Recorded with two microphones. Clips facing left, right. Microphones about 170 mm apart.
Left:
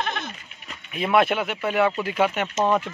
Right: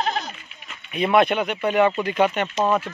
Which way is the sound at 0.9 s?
Centre (ahead or behind).